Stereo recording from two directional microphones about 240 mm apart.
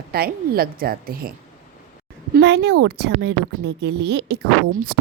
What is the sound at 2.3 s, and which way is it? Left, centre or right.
A woman's voice, right.